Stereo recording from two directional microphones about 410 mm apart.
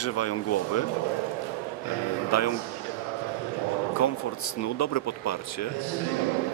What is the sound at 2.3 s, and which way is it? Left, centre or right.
Speech, left.